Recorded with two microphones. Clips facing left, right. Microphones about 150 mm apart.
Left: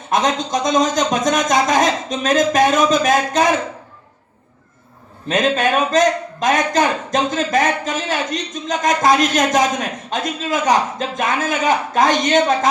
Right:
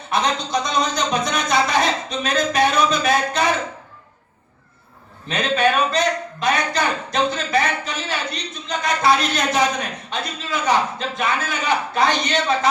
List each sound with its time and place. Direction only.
0.1 s a man's voice: 45° left (ahead or behind)
5.3 s a man's voice: 45° left (ahead or behind)